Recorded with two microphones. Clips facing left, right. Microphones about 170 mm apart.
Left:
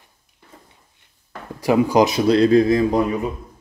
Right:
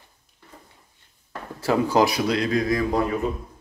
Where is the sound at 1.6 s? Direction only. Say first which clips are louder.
Left 4 dB; 15° left (ahead or behind).